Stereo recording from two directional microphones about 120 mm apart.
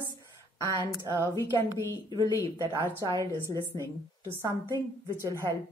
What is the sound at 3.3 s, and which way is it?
Speech, 25° left (ahead or behind).